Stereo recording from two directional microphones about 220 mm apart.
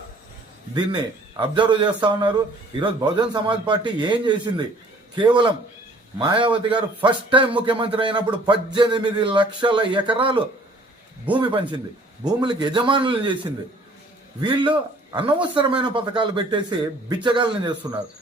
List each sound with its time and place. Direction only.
0.7 s speech: 20° right (ahead or behind)
6.5 s a man's voice: 5° right (ahead or behind)
7.0 s speech: 20° right (ahead or behind)
14.4 s speech: 20° right (ahead or behind)